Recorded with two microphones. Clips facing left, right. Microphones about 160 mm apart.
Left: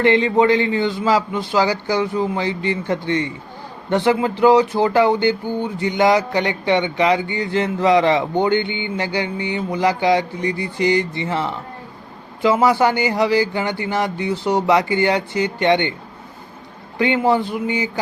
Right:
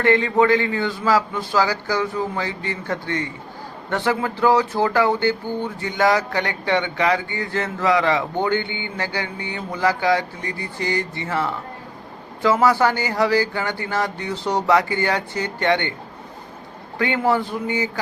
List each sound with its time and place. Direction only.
0.0 s a man's voice: 20° left (ahead or behind)
17.0 s a man's voice: 20° left (ahead or behind)